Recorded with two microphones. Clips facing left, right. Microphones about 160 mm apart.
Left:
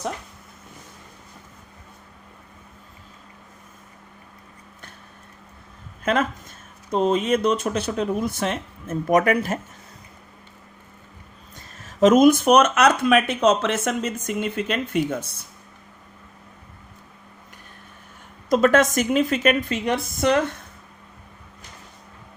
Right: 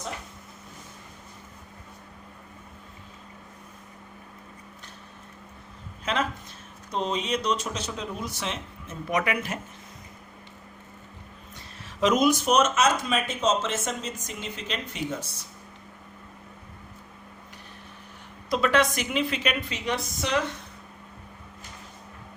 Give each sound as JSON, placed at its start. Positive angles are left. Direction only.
{"t": 6.1, "sound": "speech", "side_deg": 50}
{"t": 11.5, "sound": "speech", "side_deg": 45}
{"t": 18.4, "sound": "speech", "side_deg": 45}